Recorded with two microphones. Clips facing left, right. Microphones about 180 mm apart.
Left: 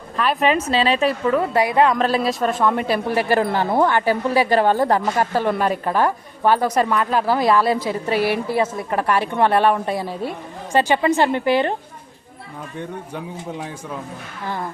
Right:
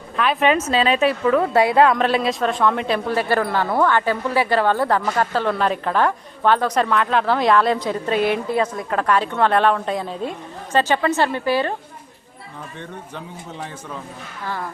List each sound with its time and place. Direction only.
0.2 s a woman's voice: centre (ahead or behind)
0.7 s a woman's voice: 30° left (ahead or behind)
1.9 s a woman's voice: centre (ahead or behind); by 11.8 s 20° left (ahead or behind)